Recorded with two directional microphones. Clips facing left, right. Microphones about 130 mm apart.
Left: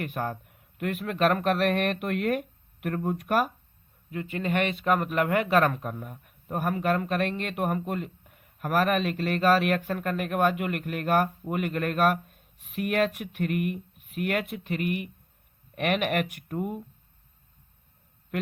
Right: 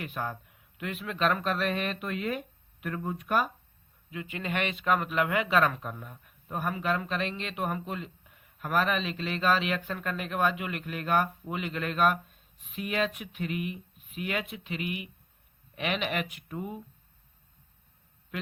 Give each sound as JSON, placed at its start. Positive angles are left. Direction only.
{"t": 0.0, "sound": "a man's voice", "side_deg": 50}
{"t": 4.1, "sound": "speech", "side_deg": 40}
{"t": 5.9, "sound": "speech", "side_deg": 10}
{"t": 6.7, "sound": "a man's voice", "side_deg": 50}